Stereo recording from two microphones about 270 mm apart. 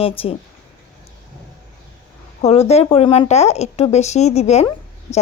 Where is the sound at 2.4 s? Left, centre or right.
Left.